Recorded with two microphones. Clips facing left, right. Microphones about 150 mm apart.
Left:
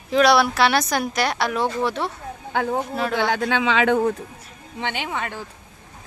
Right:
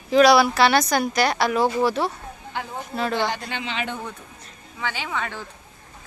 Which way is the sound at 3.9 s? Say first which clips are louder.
Left 14 dB; 50° left (ahead or behind).